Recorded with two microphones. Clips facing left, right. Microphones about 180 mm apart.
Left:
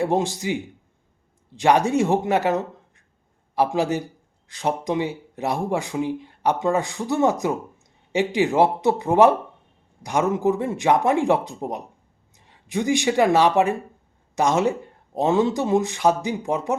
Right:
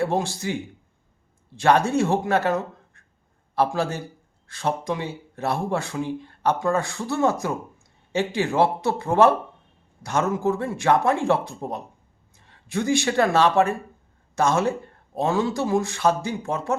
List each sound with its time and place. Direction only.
0.0 s speech: 20° left (ahead or behind)